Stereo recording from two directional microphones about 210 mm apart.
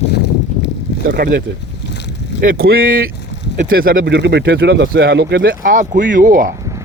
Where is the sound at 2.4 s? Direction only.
45° right (ahead or behind).